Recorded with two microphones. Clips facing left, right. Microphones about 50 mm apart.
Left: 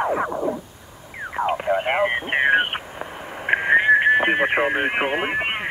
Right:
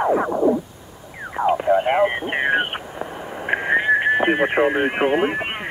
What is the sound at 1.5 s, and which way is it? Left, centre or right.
Speech, centre.